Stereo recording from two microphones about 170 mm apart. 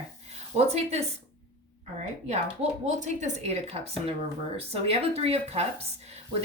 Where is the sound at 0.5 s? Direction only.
40° right (ahead or behind).